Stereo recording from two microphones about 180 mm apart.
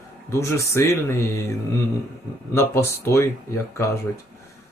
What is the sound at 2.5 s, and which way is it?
Speech, 15° left (ahead or behind).